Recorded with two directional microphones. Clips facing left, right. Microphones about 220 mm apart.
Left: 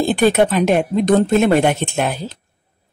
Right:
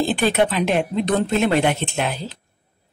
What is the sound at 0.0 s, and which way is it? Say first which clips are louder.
Speech: left 4 dB; 50° left (ahead or behind).